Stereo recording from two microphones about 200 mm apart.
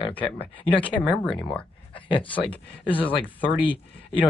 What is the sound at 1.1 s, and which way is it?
Speech, 5° left (ahead or behind).